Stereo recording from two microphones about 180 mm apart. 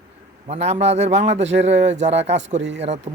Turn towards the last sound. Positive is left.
turn(degrees=-35)  # may be behind; listen again after turning